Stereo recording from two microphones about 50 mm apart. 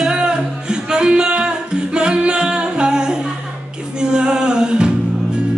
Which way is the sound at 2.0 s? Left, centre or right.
Centre.